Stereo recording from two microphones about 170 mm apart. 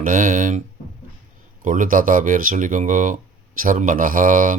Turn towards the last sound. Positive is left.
turn(degrees=-50)  # may be behind; listen again after turning